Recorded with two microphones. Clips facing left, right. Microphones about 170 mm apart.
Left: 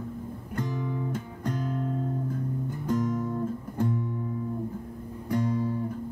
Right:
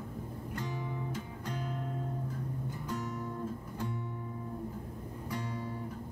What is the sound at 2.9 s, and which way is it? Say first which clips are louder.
Music: left 12 dB; 50° left (ahead or behind).